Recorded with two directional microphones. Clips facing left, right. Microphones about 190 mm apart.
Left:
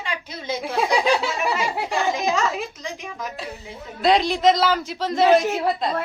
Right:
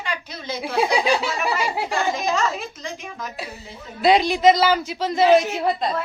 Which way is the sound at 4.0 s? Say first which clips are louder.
Right 2 dB; centre (ahead or behind).